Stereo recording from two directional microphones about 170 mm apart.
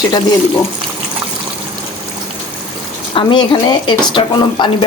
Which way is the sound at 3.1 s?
30° left (ahead or behind).